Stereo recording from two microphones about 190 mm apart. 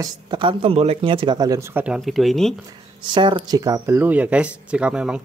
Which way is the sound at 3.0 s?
25° right (ahead or behind).